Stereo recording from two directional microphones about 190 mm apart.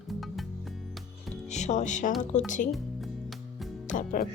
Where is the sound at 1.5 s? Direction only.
40° left (ahead or behind).